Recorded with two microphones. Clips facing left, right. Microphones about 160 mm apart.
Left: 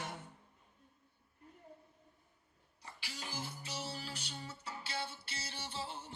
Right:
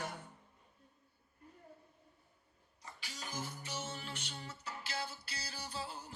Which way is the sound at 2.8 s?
30° left (ahead or behind).